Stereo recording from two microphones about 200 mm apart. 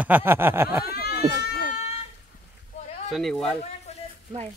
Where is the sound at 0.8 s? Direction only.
50° left (ahead or behind).